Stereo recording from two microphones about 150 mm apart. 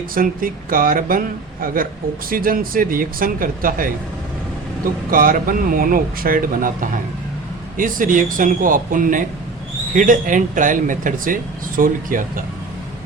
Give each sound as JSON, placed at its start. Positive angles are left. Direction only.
{"t": 0.1, "sound": "speech", "side_deg": -70}
{"t": 5.1, "sound": "speech", "side_deg": -70}